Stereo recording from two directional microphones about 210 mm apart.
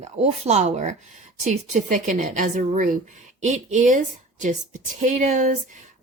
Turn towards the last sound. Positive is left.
turn(degrees=-35)  # may be behind; listen again after turning